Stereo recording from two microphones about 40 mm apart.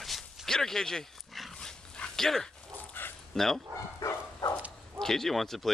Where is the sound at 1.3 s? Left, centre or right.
Centre.